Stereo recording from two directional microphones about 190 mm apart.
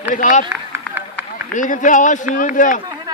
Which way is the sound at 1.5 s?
40° left (ahead or behind).